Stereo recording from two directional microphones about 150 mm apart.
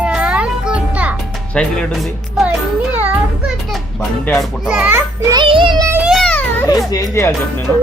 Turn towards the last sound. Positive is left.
turn(degrees=20)  # may be behind; listen again after turning